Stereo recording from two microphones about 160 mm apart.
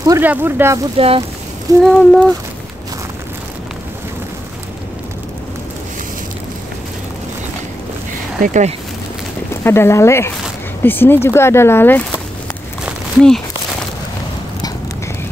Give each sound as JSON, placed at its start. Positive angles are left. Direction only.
{"t": 0.0, "sound": "speech", "side_deg": -20}
{"t": 0.9, "sound": "speech", "side_deg": -35}
{"t": 1.8, "sound": "speech", "side_deg": 5}
{"t": 8.4, "sound": "speech", "side_deg": -50}
{"t": 9.6, "sound": "speech", "side_deg": 15}